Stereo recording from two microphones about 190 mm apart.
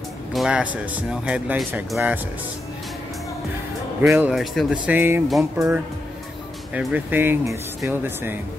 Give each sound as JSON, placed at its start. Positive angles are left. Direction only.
{"t": 0.3, "sound": "speech", "side_deg": -5}
{"t": 4.1, "sound": "speech", "side_deg": -5}